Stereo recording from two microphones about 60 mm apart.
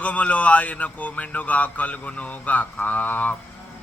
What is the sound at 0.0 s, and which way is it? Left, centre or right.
A man's voice, left.